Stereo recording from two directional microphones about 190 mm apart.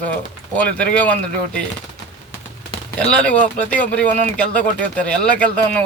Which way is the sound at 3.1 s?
5° left (ahead or behind).